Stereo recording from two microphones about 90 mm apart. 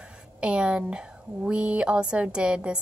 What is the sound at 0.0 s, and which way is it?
A woman's voice, 10° right (ahead or behind).